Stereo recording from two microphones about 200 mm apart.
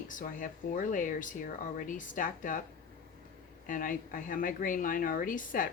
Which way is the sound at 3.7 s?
45° left (ahead or behind).